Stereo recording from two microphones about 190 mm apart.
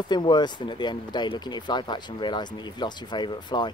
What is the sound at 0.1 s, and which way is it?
Speech, 25° left (ahead or behind).